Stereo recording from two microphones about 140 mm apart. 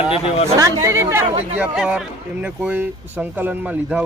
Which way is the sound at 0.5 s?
20° right (ahead or behind).